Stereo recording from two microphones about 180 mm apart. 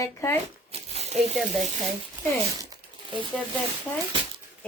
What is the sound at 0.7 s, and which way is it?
Crumpling, 35° right (ahead or behind).